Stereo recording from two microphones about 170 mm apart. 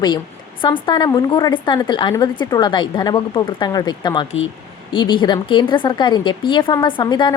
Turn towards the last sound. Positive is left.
turn(degrees=25)  # may be behind; listen again after turning